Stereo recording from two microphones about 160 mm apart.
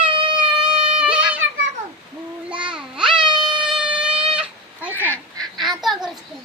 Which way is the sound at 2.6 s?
5° right (ahead or behind).